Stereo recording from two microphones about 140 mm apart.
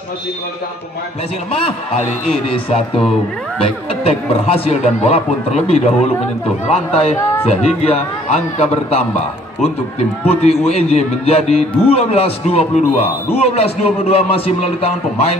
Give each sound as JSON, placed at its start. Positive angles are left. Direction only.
{"t": 2.2, "sound": "a man's voice", "side_deg": 45}
{"t": 10.2, "sound": "a man's voice", "side_deg": 50}